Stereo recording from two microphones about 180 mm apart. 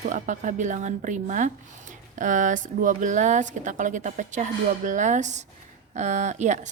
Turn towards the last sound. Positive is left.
turn(degrees=-40)  # may be behind; listen again after turning